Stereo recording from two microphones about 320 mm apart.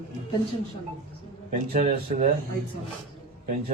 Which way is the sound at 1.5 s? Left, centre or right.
Right.